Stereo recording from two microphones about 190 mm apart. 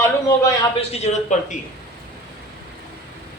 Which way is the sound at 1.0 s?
40° left (ahead or behind).